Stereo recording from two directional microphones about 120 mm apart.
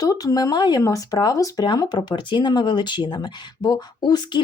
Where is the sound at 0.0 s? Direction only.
30° left (ahead or behind).